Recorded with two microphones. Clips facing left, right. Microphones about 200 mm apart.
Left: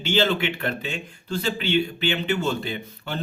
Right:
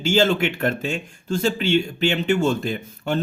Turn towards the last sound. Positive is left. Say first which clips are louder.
# right 6 dB
turn(degrees=-45)  # may be behind; listen again after turning